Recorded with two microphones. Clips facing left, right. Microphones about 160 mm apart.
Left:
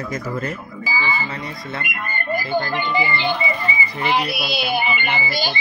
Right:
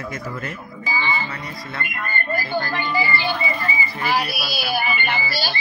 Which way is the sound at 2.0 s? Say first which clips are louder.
Left 1 dB; 15° left (ahead or behind).